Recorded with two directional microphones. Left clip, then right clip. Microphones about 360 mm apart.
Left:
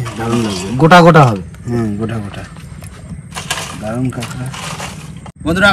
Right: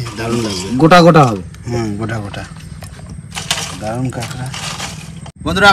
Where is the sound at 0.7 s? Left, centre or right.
Left.